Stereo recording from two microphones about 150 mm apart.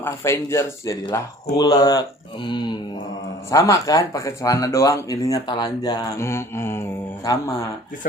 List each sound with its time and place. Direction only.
0.0 s speech: 15° left (ahead or behind)